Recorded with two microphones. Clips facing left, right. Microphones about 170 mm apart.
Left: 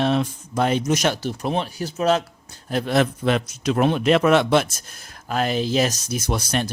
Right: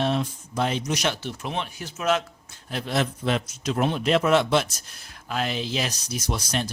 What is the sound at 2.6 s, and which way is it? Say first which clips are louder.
Speech: left 6 dB; 50° left (ahead or behind).